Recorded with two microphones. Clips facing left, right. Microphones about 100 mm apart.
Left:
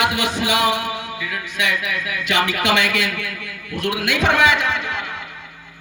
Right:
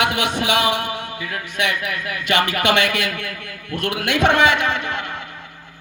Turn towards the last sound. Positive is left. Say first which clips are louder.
# right 1 dB
turn(degrees=-55)  # may be behind; listen again after turning